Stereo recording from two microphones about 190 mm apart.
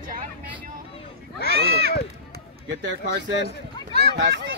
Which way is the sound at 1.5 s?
55° right (ahead or behind).